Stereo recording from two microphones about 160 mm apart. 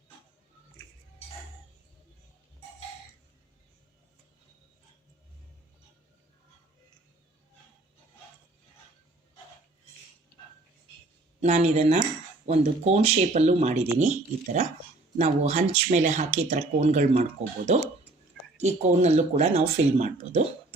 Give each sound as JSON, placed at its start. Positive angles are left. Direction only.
{"t": 11.3, "sound": "speech", "side_deg": -45}
{"t": 18.6, "sound": "speech", "side_deg": -45}